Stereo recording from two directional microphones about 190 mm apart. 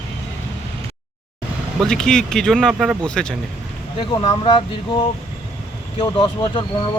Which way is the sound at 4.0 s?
25° left (ahead or behind).